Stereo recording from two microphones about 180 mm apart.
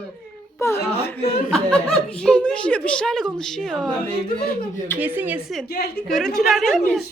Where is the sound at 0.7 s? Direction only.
65° left (ahead or behind).